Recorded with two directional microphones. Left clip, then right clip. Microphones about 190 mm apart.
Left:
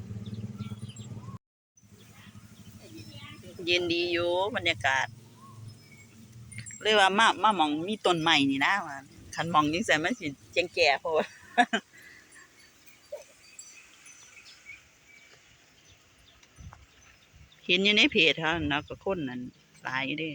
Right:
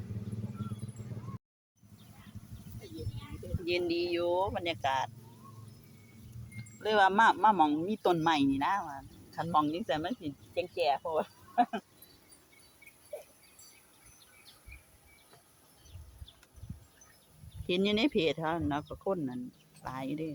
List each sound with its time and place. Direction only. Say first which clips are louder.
3.6 s speech: left 5 dB; centre (ahead or behind)
6.7 s speech: left 3 dB; 5° left (ahead or behind)
8.8 s speech: left 3 dB; 15° left (ahead or behind)
17.7 s speech: left 7 dB; 10° right (ahead or behind)